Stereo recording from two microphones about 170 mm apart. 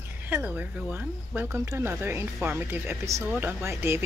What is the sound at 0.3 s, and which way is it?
Speech, 10° right (ahead or behind).